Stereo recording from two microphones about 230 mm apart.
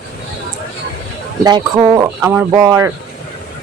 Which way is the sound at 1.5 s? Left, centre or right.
Centre.